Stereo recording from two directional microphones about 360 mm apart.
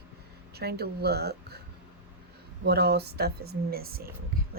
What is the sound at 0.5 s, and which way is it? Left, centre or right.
Speech, right.